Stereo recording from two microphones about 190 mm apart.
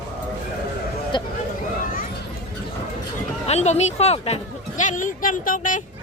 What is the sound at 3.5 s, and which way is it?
Speech, 35° left (ahead or behind).